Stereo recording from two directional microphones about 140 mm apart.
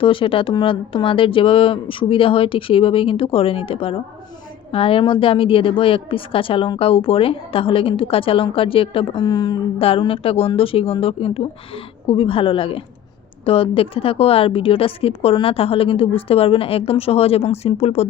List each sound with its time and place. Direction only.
0.0 s a woman's voice: 40° left (ahead or behind)